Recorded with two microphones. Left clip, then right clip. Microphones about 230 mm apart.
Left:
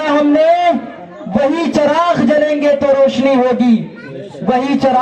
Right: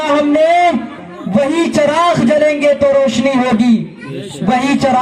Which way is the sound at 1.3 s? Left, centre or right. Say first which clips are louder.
Even; right.